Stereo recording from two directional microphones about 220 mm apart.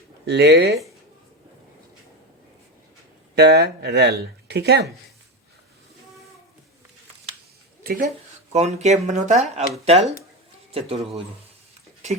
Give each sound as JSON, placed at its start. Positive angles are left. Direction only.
{"t": 0.3, "sound": "speech", "side_deg": -50}
{"t": 3.3, "sound": "speech", "side_deg": -50}
{"t": 7.9, "sound": "speech", "side_deg": -40}